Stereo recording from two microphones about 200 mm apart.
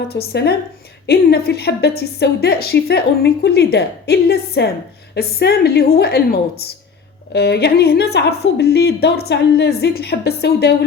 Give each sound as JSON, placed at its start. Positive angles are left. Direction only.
{"t": 0.1, "sound": "a woman's voice", "side_deg": 55}